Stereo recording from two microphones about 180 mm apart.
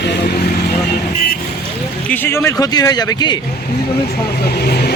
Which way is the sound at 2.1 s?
10° left (ahead or behind).